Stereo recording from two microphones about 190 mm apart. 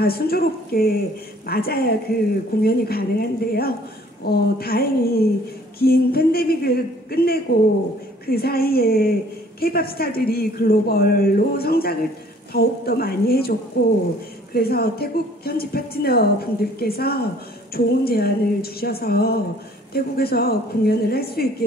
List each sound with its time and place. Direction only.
0.0 s speech: 55° left (ahead or behind)